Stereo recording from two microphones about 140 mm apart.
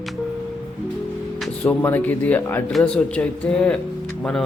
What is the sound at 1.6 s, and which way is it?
Speech, 15° left (ahead or behind).